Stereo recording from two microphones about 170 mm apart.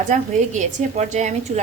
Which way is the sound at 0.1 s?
45° right (ahead or behind).